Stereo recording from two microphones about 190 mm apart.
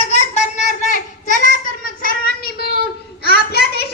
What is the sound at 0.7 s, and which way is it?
Child singing, 40° left (ahead or behind).